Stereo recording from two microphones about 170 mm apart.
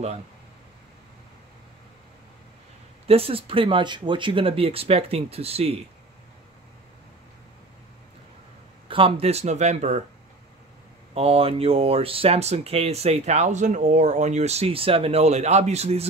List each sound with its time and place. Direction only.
3.1 s speech: 35° right (ahead or behind)
8.8 s speech: 30° right (ahead or behind)
11.1 s speech: 35° right (ahead or behind)